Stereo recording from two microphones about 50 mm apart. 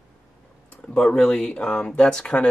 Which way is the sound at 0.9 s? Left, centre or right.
Centre.